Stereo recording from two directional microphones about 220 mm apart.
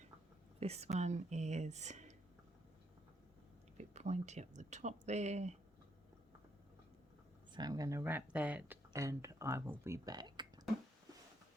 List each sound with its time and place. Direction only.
0.6 s speech: 30° right (ahead or behind)
3.8 s speech: 30° right (ahead or behind)
7.5 s speech: 15° right (ahead or behind)